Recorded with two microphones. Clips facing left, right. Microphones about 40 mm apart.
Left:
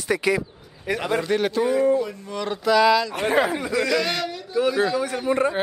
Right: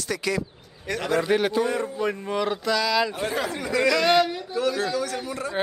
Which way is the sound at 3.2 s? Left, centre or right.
Left.